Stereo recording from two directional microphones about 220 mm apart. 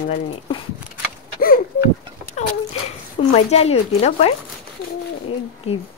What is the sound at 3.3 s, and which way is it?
Speech, 30° left (ahead or behind).